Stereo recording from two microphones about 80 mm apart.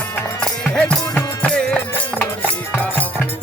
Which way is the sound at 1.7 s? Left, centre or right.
Left.